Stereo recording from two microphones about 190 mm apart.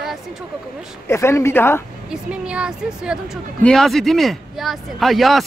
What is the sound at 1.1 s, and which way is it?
Speech, 15° left (ahead or behind).